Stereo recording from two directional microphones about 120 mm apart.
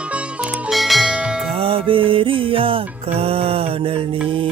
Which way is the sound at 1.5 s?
50° right (ahead or behind).